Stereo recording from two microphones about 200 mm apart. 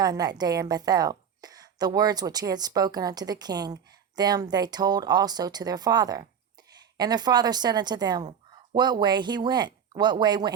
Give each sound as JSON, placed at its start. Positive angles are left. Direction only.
{"t": 0.0, "sound": "a woman's voice", "side_deg": -20}